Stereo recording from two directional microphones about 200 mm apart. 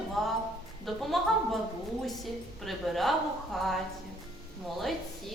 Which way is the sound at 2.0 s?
Centre (ahead or behind).